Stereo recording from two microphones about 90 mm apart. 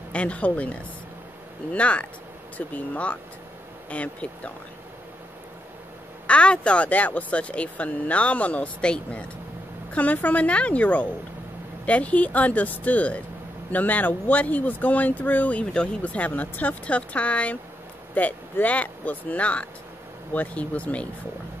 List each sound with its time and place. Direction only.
0.1 s speech: 15° left (ahead or behind)
6.2 s speech: 15° left (ahead or behind)